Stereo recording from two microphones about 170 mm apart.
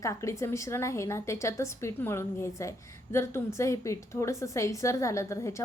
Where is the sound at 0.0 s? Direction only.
20° left (ahead or behind).